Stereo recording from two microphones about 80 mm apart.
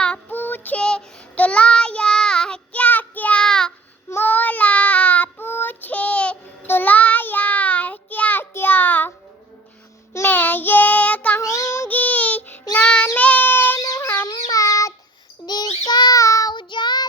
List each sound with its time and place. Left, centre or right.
0.3 s child singing: left
0.8 s child singing: centre
4.1 s child singing: left
11.3 s child singing: left
11.9 s child singing: centre
13.8 s fowl: left
14.5 s child singing: left
15.4 s child singing: left
16.5 s child singing: left